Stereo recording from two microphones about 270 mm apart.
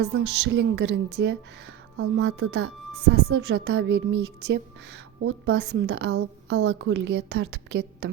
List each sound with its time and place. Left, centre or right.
0.0 s speech: right